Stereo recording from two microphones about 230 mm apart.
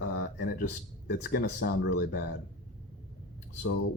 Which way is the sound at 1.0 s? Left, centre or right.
Left.